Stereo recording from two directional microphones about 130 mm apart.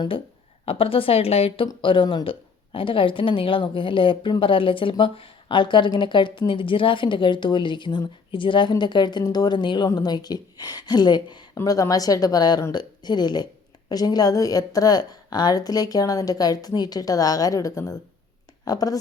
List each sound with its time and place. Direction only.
0.6 s a woman's voice: 45° left (ahead or behind); by 18.9 s 30° left (ahead or behind)